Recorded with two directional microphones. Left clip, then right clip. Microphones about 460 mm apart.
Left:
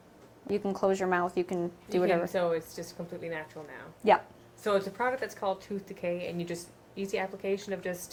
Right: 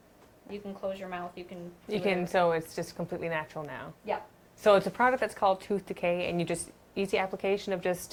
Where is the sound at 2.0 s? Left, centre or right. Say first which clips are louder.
Right 3 dB; right.